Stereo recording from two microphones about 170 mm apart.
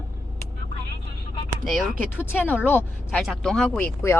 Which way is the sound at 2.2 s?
10° left (ahead or behind).